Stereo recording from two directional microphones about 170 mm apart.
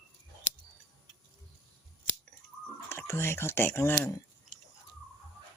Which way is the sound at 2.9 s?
15° left (ahead or behind).